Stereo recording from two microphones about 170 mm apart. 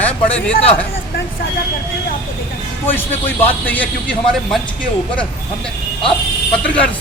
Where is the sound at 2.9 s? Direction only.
10° left (ahead or behind).